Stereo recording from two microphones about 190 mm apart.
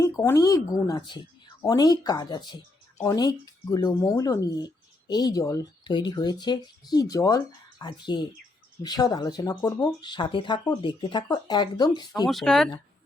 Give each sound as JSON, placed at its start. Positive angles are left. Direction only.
{"t": 0.0, "sound": "speech", "side_deg": 15}
{"t": 12.3, "sound": "speech", "side_deg": 0}